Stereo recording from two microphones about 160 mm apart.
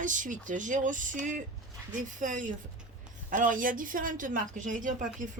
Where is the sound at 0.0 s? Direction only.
55° right (ahead or behind).